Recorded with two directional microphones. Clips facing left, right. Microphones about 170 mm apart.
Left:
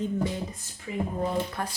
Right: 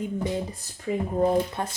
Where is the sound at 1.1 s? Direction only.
45° right (ahead or behind).